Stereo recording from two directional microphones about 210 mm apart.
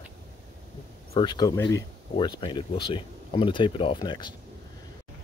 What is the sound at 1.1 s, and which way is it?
Speech, 20° left (ahead or behind).